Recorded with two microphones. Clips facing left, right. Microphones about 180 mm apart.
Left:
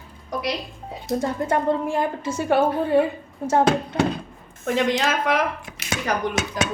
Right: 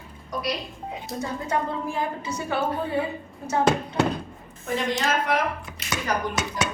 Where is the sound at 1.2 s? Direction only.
55° left (ahead or behind).